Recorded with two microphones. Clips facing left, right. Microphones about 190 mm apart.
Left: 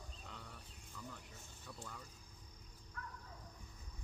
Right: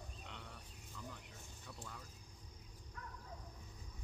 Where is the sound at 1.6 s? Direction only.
Centre (ahead or behind).